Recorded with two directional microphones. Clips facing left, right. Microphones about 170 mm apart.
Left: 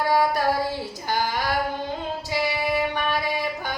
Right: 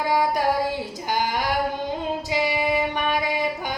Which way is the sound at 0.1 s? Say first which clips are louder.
Right 1 dB; 15° right (ahead or behind).